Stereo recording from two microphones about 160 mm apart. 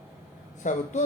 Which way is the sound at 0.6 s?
50° left (ahead or behind).